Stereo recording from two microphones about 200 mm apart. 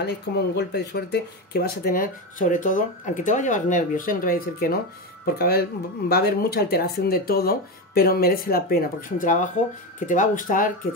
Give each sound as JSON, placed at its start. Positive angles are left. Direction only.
{"t": 0.6, "sound": "speech", "side_deg": 55}